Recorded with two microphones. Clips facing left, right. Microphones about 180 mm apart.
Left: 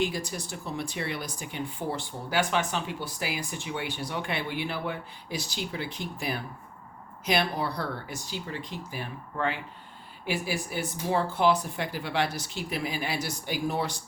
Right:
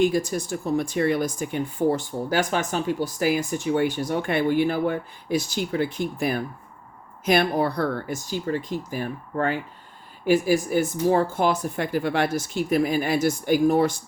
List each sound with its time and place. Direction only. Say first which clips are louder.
0.0 s speech: right 9 dB; 50° right (ahead or behind)